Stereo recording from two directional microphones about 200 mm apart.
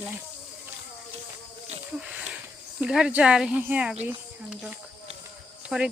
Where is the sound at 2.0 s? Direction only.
5° right (ahead or behind).